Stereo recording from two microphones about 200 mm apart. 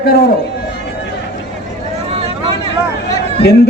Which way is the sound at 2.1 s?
30° right (ahead or behind).